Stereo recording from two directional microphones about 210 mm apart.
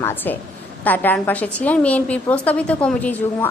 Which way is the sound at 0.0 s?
10° left (ahead or behind).